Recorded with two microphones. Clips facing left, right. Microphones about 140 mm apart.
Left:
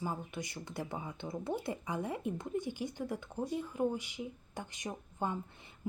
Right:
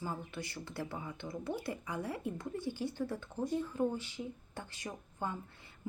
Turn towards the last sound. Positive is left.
turn(degrees=20)  # may be behind; listen again after turning